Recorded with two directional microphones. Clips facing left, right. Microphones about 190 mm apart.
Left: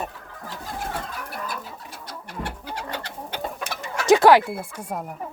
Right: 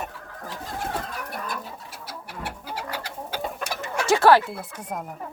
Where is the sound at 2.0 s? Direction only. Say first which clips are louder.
Left 2 dB; 5° right (ahead or behind).